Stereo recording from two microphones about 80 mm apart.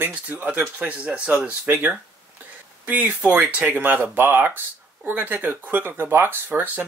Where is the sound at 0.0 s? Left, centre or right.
Centre.